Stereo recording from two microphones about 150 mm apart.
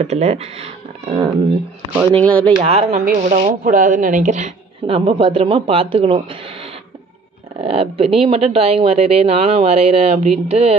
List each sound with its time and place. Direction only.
0.0 s speech: 45° right (ahead or behind)
2.1 s speech: 10° left (ahead or behind)
2.6 s speech: 45° right (ahead or behind)
3.1 s speech: 60° right (ahead or behind)
4.8 s speech: 35° right (ahead or behind)